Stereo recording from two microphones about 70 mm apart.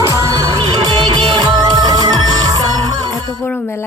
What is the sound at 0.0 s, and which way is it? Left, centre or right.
Music, right.